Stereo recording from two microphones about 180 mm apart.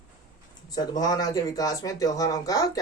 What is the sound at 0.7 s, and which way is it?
Speech, 20° left (ahead or behind).